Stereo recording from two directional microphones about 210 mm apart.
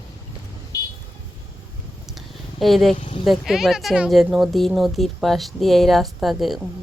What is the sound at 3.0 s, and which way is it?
Speech, 30° left (ahead or behind).